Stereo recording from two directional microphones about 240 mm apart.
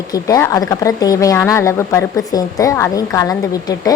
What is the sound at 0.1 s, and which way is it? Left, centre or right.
A woman's voice, centre.